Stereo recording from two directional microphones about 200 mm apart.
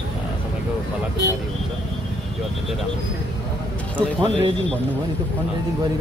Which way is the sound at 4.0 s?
25° right (ahead or behind).